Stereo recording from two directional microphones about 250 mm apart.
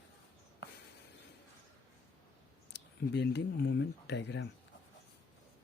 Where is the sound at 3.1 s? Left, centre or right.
Left.